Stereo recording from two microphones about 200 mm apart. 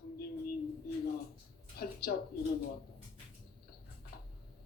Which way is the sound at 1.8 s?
50° left (ahead or behind).